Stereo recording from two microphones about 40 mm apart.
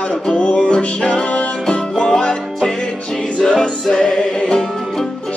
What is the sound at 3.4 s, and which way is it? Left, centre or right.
Music, centre.